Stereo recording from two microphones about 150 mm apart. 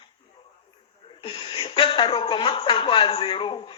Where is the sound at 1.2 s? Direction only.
35° left (ahead or behind).